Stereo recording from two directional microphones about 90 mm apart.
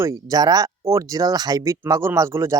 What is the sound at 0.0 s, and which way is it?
Speech, 40° right (ahead or behind).